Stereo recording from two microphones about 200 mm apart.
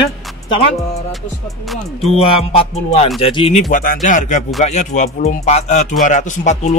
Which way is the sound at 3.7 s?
40° left (ahead or behind).